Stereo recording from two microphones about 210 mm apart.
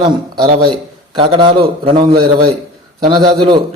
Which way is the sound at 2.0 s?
45° right (ahead or behind).